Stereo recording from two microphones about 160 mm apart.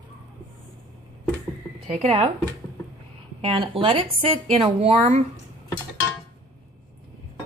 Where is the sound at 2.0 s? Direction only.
35° right (ahead or behind).